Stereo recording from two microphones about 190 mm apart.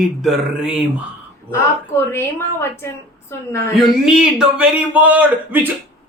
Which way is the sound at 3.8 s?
Centre (ahead or behind).